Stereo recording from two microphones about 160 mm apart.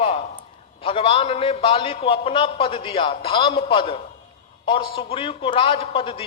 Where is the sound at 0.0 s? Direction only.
35° left (ahead or behind).